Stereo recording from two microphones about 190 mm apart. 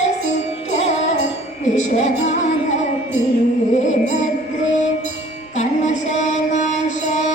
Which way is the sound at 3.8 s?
40° left (ahead or behind).